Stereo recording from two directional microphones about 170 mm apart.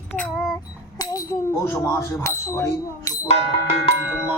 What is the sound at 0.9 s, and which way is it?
Speech, 20° left (ahead or behind).